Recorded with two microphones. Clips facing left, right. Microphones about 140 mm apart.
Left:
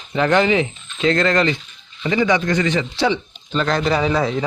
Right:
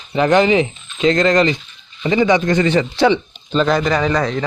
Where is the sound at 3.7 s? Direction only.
Centre (ahead or behind).